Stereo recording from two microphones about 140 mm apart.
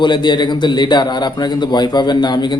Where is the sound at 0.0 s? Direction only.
35° left (ahead or behind).